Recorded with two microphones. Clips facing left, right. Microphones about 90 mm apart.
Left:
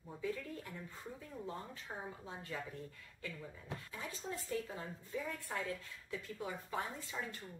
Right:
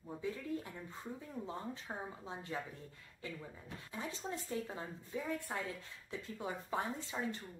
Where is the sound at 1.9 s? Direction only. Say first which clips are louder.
Right 2 dB; 25° right (ahead or behind).